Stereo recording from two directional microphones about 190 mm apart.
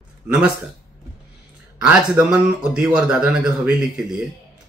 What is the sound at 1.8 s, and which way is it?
Speech, 5° right (ahead or behind).